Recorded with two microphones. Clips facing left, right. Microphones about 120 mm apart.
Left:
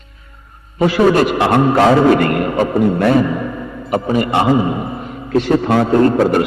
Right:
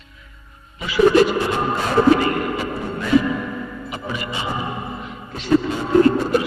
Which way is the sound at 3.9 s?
50° left (ahead or behind).